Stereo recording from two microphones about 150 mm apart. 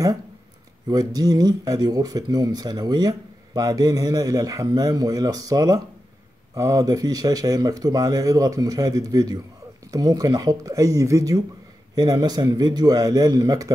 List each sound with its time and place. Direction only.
0.8 s speech: 25° right (ahead or behind)